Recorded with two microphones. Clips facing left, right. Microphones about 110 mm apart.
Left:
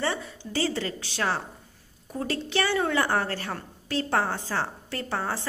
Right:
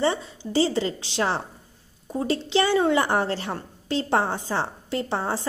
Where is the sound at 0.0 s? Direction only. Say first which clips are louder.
Right 5 dB; 20° right (ahead or behind).